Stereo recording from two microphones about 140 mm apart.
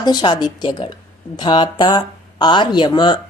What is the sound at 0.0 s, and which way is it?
Speech, 30° left (ahead or behind).